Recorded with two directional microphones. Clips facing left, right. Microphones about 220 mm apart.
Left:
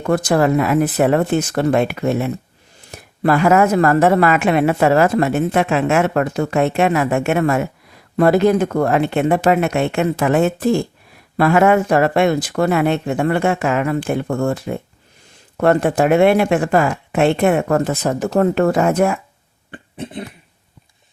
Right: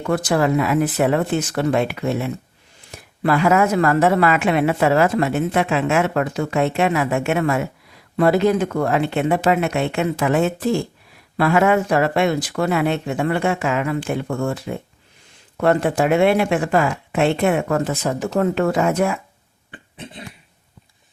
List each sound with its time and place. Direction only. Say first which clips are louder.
0.0 s a woman's voice: left 3 dB; 45° left (ahead or behind)